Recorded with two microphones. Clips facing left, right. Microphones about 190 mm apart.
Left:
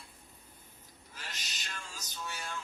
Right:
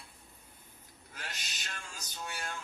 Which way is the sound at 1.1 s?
55° right (ahead or behind).